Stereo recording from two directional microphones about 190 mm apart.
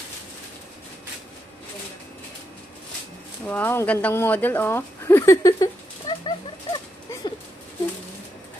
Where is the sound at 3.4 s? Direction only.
10° left (ahead or behind).